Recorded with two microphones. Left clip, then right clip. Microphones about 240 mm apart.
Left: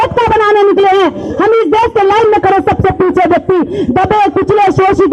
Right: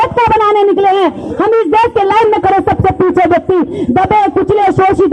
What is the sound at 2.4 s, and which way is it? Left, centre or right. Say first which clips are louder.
Shofar: left 1 dB; left.